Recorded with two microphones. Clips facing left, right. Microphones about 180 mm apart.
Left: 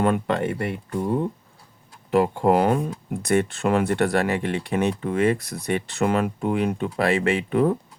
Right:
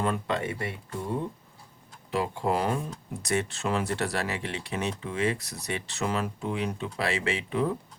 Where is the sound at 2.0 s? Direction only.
55° left (ahead or behind).